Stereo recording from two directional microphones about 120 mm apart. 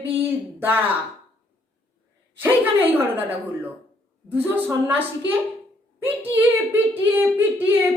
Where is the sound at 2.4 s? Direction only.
15° right (ahead or behind).